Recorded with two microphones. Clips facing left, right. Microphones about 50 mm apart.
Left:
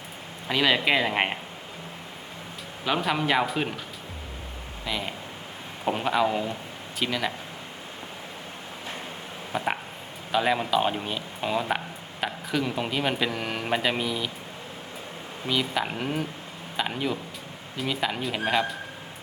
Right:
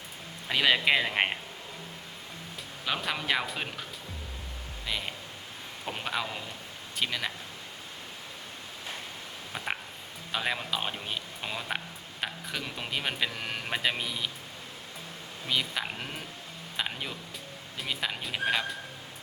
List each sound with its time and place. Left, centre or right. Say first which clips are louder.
0.5 s speech: left 2 dB; centre
2.8 s speech: left 6 dB; centre
4.9 s speech: left 4 dB; centre
6.2 s speech: left 12 dB; left
7.0 s speech: left 4 dB; centre
10.3 s speech: left 8 dB; centre
15.4 s speech: left 5 dB; centre